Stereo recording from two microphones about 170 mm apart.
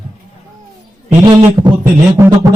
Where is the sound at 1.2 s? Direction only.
25° right (ahead or behind).